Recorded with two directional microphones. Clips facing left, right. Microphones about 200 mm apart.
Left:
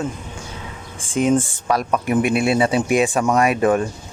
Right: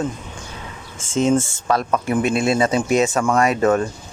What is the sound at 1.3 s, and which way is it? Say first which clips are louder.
Speech: even; 15° left (ahead or behind).